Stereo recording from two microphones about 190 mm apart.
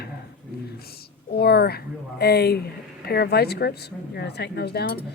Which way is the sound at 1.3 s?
60° left (ahead or behind).